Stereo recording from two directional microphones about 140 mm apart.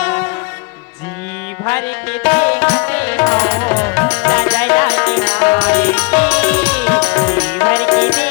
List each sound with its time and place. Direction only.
0.0 s music: 10° left (ahead or behind)
2.2 s music: 10° left (ahead or behind)